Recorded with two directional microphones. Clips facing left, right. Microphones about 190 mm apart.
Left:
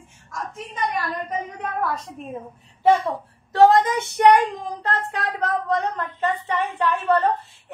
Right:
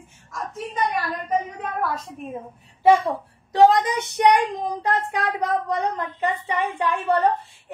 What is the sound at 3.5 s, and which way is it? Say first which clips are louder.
A woman's voice: left 1 dB; 15° right (ahead or behind).